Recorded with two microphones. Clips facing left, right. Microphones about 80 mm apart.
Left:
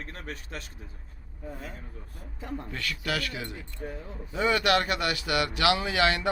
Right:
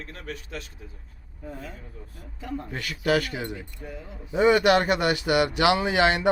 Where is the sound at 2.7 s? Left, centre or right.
Right.